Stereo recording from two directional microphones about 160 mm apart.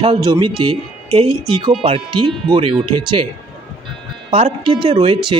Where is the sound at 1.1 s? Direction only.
35° right (ahead or behind).